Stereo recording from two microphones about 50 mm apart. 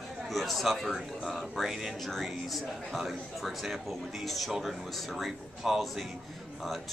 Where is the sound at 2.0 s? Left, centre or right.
Centre.